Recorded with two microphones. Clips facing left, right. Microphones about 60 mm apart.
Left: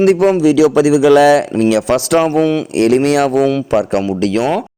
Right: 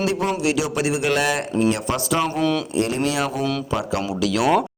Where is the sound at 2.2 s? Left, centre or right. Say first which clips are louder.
Left 8 dB; left.